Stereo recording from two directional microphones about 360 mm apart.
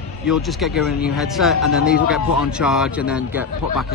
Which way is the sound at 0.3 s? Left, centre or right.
Centre.